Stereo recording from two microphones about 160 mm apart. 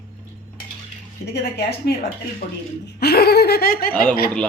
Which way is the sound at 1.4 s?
90° left.